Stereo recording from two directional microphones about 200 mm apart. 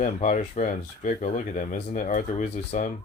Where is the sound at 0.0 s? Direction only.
40° left (ahead or behind).